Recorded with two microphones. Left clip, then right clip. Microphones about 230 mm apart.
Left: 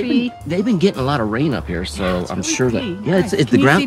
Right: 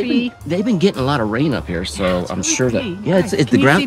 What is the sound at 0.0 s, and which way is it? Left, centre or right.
Speech, centre.